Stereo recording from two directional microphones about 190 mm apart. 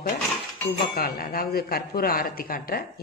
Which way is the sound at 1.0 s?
50° left (ahead or behind).